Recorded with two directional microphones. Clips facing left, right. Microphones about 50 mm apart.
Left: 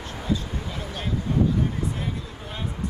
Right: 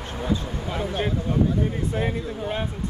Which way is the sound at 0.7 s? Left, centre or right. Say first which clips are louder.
Right 6 dB; right.